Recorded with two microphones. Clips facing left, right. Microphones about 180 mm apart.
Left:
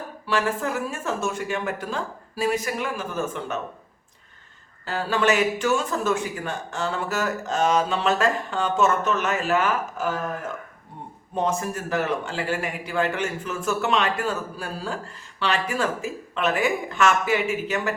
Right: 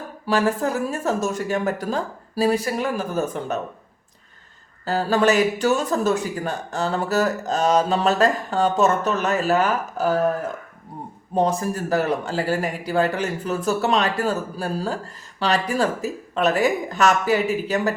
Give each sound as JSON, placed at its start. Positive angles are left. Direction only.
{"t": 0.3, "sound": "speech", "side_deg": -40}
{"t": 4.9, "sound": "speech", "side_deg": -40}
{"t": 11.3, "sound": "speech", "side_deg": -35}